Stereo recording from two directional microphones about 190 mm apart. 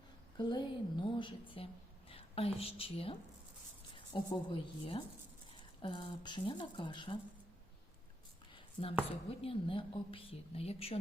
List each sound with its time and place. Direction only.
0.3 s a woman's voice: 25° left (ahead or behind)
8.5 s a sound: 30° left (ahead or behind)
9.0 s a woman's voice: 30° left (ahead or behind)